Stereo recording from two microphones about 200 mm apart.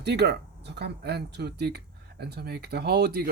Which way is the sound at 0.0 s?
55° right (ahead or behind).